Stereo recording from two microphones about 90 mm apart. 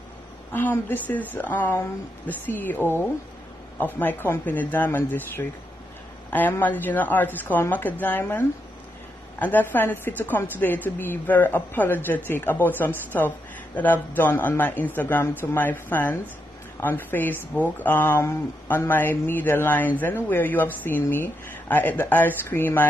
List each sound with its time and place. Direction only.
0.5 s a woman's voice: 20° left (ahead or behind)
3.8 s a woman's voice: 20° left (ahead or behind)
6.6 s a woman's voice: 20° left (ahead or behind)